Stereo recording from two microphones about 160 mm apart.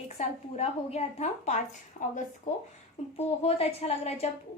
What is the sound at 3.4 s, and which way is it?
Speech, 40° left (ahead or behind).